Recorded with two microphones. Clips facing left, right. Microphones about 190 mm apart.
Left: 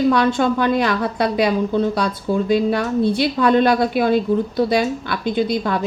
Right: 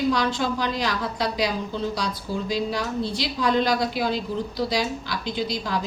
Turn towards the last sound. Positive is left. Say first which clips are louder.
# left 7 dB
turn(degrees=60)  # may be behind; listen again after turning